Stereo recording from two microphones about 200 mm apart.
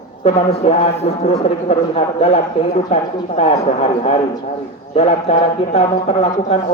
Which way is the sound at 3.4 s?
30° left (ahead or behind).